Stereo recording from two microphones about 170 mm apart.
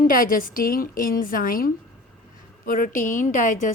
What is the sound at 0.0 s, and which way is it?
A woman's voice, 55° left (ahead or behind).